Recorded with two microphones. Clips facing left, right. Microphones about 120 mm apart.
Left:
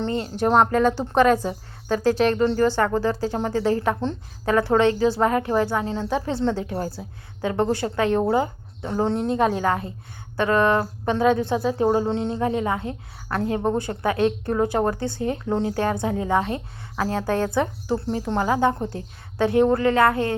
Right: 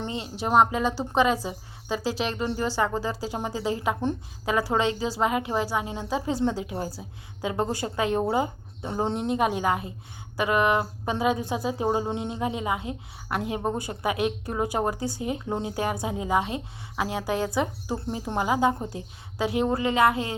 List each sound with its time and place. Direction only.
0.2 s speech: 5° right (ahead or behind)